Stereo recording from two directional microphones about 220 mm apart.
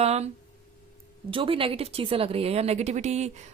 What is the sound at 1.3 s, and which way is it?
Speech, 25° right (ahead or behind).